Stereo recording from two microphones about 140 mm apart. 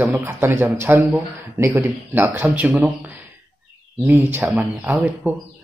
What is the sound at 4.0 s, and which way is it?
A man's voice, 15° right (ahead or behind).